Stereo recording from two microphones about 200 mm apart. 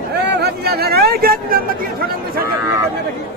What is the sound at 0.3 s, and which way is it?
Vehicle, 50° right (ahead or behind).